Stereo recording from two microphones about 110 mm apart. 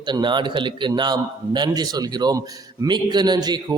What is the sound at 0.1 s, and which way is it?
A man's voice, 45° right (ahead or behind).